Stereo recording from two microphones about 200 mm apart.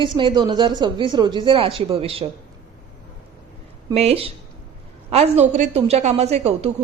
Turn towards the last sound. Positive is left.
turn(degrees=-30)  # may be behind; listen again after turning